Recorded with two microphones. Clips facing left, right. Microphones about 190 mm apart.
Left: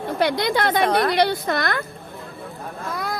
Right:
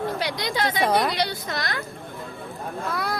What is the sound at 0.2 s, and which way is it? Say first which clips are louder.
Speech: left 6 dB; 55° left (ahead or behind).